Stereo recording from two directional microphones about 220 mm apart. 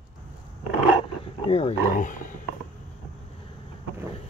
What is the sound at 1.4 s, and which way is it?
Speech, 30° left (ahead or behind).